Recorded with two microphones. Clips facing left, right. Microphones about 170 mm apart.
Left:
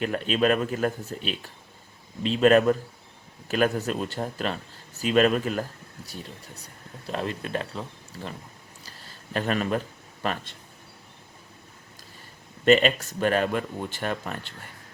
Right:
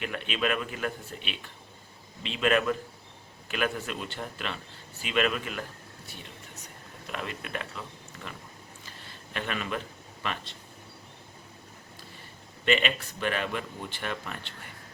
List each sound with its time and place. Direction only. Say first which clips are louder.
0.0 s speech: left 7 dB; 40° left (ahead or behind)
8.8 s a sound: even; 40° left (ahead or behind)
10.2 s speech: left 6 dB; 40° left (ahead or behind)
12.6 s speech: left 8 dB; 40° left (ahead or behind)